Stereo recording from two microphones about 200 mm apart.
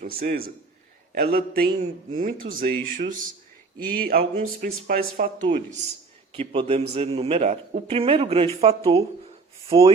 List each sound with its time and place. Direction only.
0.0 s a man's voice: 45° right (ahead or behind); by 9.9 s 30° right (ahead or behind)